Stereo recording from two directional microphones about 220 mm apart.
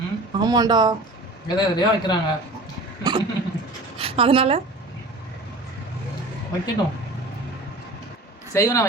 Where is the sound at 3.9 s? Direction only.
25° right (ahead or behind).